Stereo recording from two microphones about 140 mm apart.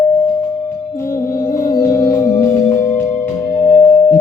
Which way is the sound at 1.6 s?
90° left.